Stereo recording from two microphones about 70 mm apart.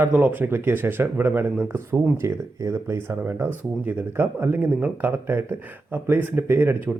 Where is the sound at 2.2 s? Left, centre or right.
Right.